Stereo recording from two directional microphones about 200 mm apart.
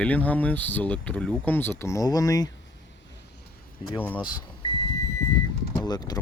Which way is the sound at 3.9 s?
10° left (ahead or behind).